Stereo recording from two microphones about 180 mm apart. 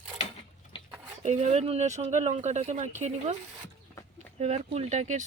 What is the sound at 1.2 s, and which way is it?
Speech, 40° right (ahead or behind).